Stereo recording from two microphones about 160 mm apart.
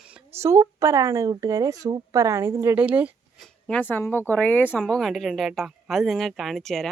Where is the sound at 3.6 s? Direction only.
10° left (ahead or behind).